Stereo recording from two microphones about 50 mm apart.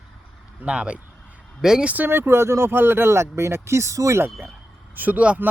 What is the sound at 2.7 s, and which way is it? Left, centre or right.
Speech, right.